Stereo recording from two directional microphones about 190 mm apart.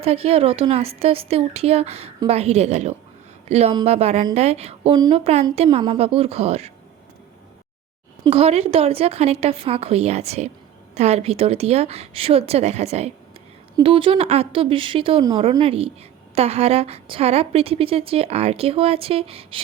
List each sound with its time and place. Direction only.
0.0 s a woman's voice: 30° right (ahead or behind)
8.2 s a woman's voice: 30° right (ahead or behind)